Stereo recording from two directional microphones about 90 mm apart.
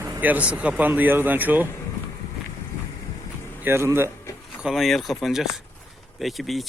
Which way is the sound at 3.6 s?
30° right (ahead or behind).